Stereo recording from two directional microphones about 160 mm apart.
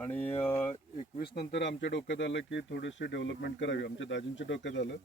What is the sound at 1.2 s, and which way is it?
Speech, 90° left.